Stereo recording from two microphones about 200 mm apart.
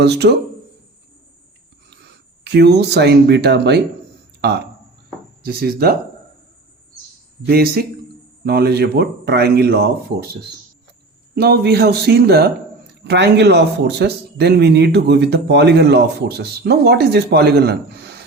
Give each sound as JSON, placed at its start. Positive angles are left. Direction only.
{"t": 0.0, "sound": "a man's voice", "side_deg": -55}
{"t": 1.9, "sound": "speech", "side_deg": -55}
{"t": 4.4, "sound": "a sound", "side_deg": -55}
{"t": 5.4, "sound": "speech", "side_deg": -50}
{"t": 7.4, "sound": "speech", "side_deg": -50}
{"t": 11.3, "sound": "a man's voice", "side_deg": -55}